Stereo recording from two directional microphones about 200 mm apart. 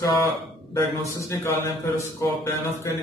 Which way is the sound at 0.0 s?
15° left (ahead or behind).